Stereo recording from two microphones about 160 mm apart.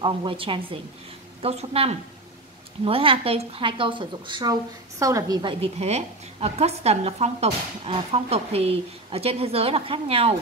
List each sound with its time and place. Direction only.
0.0 s a woman's voice: 30° right (ahead or behind)